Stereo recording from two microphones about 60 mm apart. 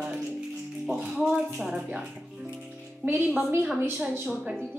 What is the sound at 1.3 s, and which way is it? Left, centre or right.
Speech, centre.